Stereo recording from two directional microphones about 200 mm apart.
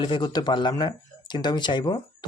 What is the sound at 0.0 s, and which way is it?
Speech, 20° left (ahead or behind).